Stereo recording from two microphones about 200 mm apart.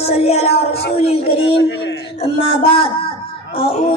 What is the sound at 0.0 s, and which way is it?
Music, 30° left (ahead or behind).